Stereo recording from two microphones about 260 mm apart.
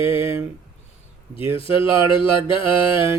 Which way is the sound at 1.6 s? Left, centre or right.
Left.